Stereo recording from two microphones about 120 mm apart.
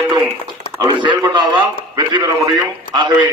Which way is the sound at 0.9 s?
40° right (ahead or behind).